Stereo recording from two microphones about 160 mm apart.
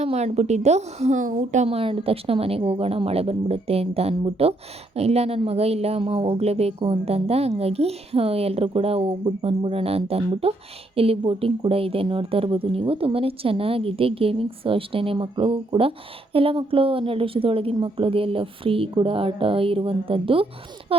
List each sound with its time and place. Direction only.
0.0 s a woman's voice: 40° right (ahead or behind)